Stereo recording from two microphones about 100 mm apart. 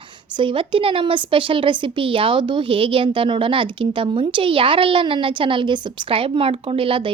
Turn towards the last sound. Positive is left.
turn(degrees=-60)  # may be behind; listen again after turning